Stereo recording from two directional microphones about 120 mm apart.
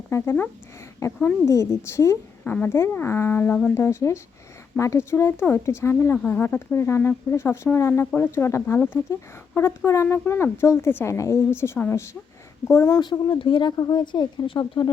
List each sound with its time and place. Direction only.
0.1 s speech: 20° left (ahead or behind)
2.4 s speech: 15° left (ahead or behind); by 14.6 s 45° left (ahead or behind)